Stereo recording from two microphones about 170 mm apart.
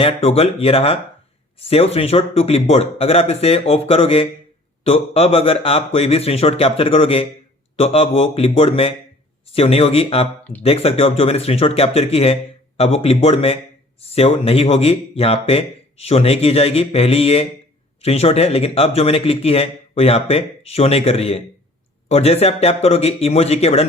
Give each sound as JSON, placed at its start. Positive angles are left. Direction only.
{"t": 0.0, "sound": "speech", "side_deg": 35}